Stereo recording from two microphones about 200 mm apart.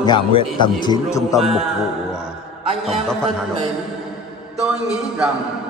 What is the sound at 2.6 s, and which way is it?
Music, 30° right (ahead or behind).